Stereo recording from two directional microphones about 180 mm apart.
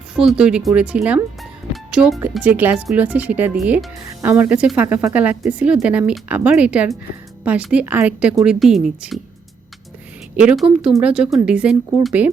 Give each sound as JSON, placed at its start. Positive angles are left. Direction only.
{"t": 0.2, "sound": "a woman's voice", "side_deg": -5}
{"t": 10.3, "sound": "a woman's voice", "side_deg": -5}